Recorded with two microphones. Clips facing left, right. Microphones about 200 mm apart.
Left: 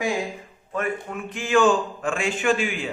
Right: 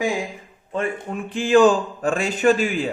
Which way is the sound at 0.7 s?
30° right (ahead or behind).